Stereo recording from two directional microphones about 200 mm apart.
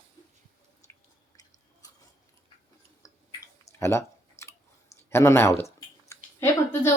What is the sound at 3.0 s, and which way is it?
Clicking, 15° left (ahead or behind).